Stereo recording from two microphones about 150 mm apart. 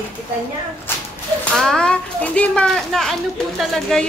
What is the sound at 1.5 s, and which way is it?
A child's voice, 5° left (ahead or behind).